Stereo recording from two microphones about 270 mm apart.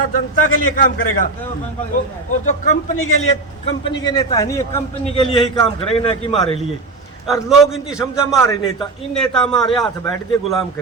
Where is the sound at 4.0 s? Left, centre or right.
Centre.